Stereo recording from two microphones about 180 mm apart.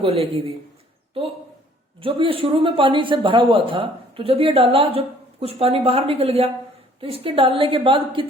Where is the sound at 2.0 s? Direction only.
30° right (ahead or behind).